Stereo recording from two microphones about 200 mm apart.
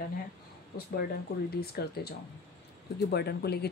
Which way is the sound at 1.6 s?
50° left (ahead or behind).